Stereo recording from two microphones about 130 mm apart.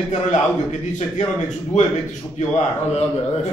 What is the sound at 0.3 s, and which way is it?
Speech, 65° left (ahead or behind).